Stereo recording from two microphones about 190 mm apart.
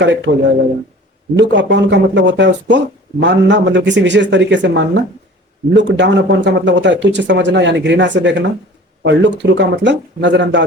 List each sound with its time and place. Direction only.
0.3 s speech: 70° right (ahead or behind)